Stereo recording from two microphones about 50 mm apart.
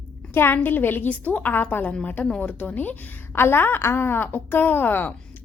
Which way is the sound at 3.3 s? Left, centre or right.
Left.